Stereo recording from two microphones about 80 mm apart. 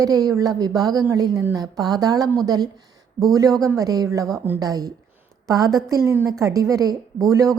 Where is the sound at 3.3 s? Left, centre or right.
Right.